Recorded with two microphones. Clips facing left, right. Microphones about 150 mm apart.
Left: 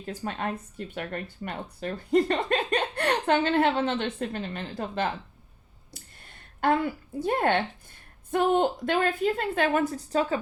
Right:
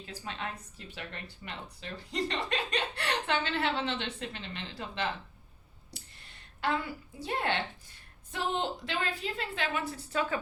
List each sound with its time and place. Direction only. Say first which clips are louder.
0.0 s a woman's voice: left 8 dB; 50° left (ahead or behind)